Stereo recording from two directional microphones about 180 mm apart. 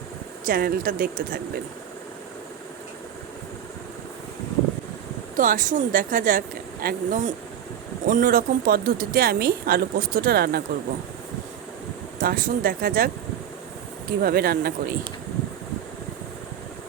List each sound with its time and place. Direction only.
0.4 s speech: 55° right (ahead or behind)
5.4 s a woman's voice: 50° right (ahead or behind)
12.2 s speech: 55° right (ahead or behind)
14.2 s a woman's voice: 55° right (ahead or behind)